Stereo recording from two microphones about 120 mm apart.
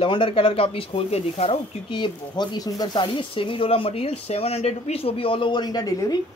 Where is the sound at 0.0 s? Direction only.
45° left (ahead or behind); by 6.1 s 30° left (ahead or behind).